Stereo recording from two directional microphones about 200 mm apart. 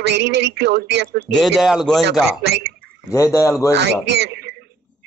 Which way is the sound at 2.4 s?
55° right (ahead or behind).